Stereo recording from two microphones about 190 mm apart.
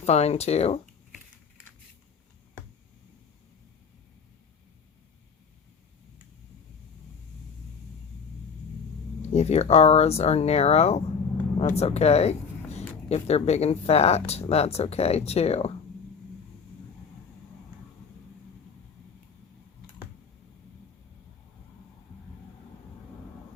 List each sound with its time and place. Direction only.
0.0 s speech: 35° left (ahead or behind)
9.2 s speech: 35° left (ahead or behind)